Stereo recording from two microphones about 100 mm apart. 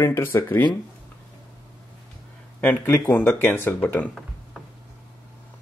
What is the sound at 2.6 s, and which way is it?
Speech, 20° left (ahead or behind).